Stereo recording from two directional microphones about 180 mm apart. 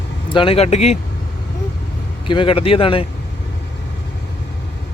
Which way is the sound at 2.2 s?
30° left (ahead or behind).